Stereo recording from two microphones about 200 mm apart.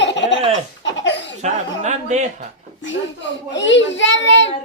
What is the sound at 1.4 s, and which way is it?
Speech, 35° right (ahead or behind).